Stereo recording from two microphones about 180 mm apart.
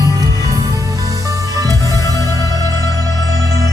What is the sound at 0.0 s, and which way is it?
Music, 20° right (ahead or behind).